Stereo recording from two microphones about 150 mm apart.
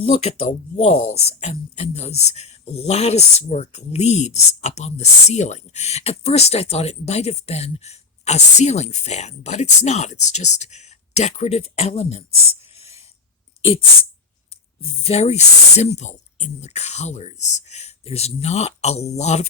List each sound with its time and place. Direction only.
0.0 s speech: 45° left (ahead or behind)
14.8 s speech: 40° left (ahead or behind)